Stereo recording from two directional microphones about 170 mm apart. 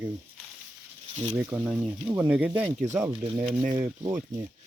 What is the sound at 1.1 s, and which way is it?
Speech, 40° right (ahead or behind).